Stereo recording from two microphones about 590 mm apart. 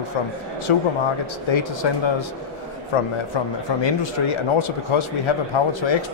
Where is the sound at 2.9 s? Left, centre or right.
Left.